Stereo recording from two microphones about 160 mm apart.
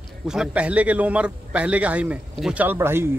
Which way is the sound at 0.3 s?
5° right (ahead or behind).